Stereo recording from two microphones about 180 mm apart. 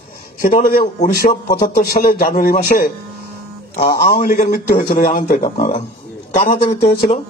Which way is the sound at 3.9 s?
55° left (ahead or behind).